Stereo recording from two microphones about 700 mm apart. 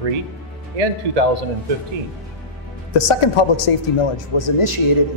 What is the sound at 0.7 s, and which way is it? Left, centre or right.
Speech, right.